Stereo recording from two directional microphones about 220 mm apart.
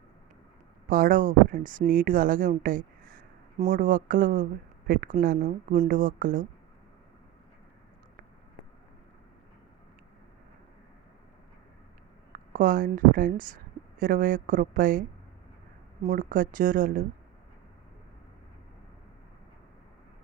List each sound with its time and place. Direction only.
0.9 s speech: 40° right (ahead or behind)
12.3 s speech: 40° right (ahead or behind)
16.0 s speech: 40° right (ahead or behind)